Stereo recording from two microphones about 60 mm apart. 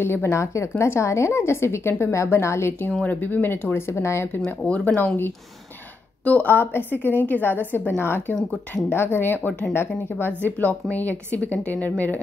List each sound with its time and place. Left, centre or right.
0.0 s a woman's voice: left
0.3 s a woman's voice: left
3.1 s a woman's voice: left
3.8 s a woman's voice: left
4.5 s a woman's voice: left
6.5 s a woman's voice: left